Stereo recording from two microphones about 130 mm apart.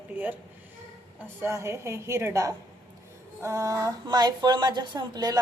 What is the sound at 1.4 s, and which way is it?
A woman's voice, 20° right (ahead or behind).